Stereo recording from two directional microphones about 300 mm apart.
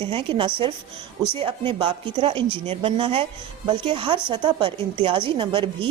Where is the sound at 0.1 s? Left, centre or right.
Centre.